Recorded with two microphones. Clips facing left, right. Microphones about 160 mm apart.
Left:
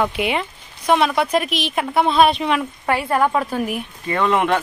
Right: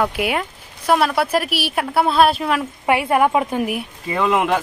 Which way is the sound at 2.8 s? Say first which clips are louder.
Right 3 dB; 15° right (ahead or behind).